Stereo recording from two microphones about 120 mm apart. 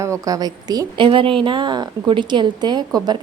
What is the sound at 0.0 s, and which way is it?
A woman's voice, 25° right (ahead or behind).